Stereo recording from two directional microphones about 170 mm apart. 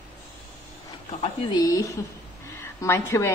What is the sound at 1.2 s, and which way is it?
A woman's voice, 30° left (ahead or behind).